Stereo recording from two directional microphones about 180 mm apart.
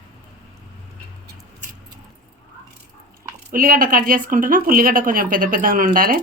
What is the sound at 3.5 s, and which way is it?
Speech, 55° right (ahead or behind).